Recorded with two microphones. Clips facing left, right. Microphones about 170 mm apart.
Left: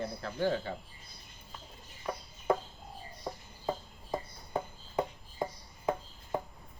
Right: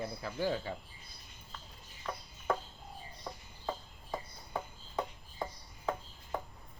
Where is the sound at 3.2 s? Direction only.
20° left (ahead or behind).